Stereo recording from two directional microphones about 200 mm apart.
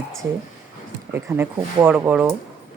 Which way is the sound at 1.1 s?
10° right (ahead or behind).